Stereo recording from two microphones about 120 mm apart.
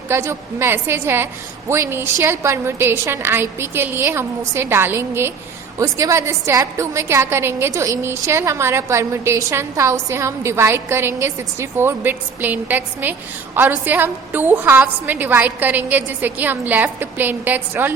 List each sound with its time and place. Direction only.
0.1 s a woman's voice: 20° right (ahead or behind)